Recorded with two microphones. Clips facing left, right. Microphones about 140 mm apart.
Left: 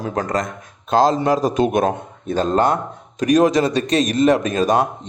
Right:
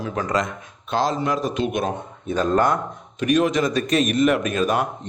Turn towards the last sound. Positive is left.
turn(degrees=35)  # may be behind; listen again after turning